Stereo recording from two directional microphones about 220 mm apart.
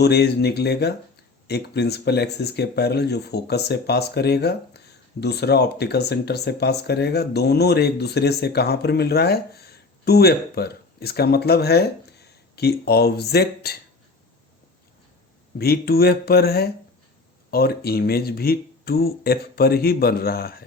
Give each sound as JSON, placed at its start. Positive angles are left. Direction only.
{"t": 0.0, "sound": "speech", "side_deg": 50}
{"t": 15.5, "sound": "speech", "side_deg": 45}